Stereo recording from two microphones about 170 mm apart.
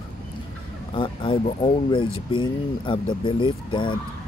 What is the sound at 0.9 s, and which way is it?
Speech, 30° left (ahead or behind).